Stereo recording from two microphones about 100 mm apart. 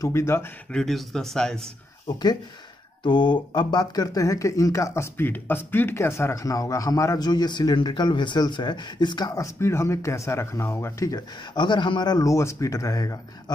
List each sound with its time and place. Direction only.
0.0 s speech: 25° left (ahead or behind)
0.7 s speech: 5° left (ahead or behind)
3.0 s speech: 50° left (ahead or behind); by 7.2 s 35° left (ahead or behind)
7.2 s speech: 45° left (ahead or behind)
9.3 s speech: 30° left (ahead or behind)
11.5 s speech: 50° left (ahead or behind)
12.3 s speech: 30° left (ahead or behind)